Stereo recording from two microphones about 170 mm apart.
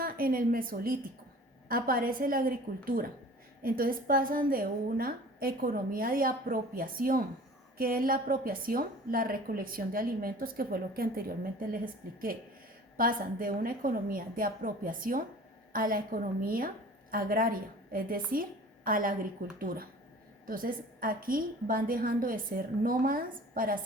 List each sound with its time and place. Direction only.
0.0 s a woman's voice: 60° right (ahead or behind)
13.0 s a woman's voice: 55° right (ahead or behind)